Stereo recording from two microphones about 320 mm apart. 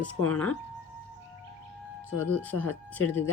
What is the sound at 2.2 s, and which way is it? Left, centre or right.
Speech, centre.